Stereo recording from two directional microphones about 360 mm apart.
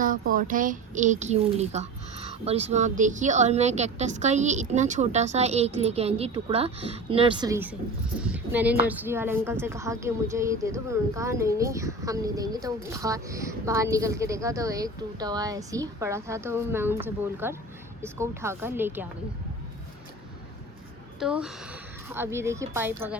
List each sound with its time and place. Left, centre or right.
0.0 s a child's voice: right; by 19.0 s centre
21.2 s a woman's voice: centre